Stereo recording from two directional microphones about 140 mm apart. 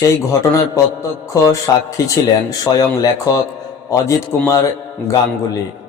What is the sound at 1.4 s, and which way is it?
Speech, 25° left (ahead or behind).